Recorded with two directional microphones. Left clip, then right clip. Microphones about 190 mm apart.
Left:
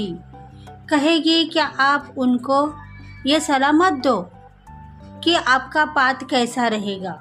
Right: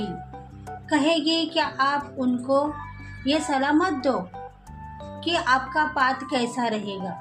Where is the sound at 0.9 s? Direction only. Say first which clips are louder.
Left 5 dB; 50° left (ahead or behind).